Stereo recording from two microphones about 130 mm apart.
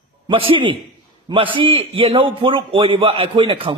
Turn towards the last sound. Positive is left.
turn(degrees=-40)  # may be behind; listen again after turning